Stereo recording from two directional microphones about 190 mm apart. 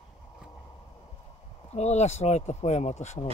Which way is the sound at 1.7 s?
35° left (ahead or behind).